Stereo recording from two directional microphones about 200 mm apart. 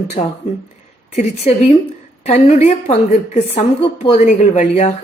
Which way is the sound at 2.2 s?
30° left (ahead or behind).